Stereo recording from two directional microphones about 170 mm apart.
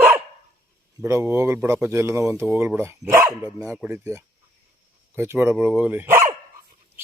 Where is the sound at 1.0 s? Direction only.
15° right (ahead or behind).